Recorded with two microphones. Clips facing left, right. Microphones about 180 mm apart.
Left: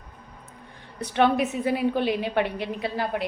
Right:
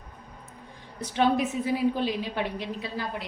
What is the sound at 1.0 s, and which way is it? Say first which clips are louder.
A woman's voice: left 2 dB; 60° left (ahead or behind).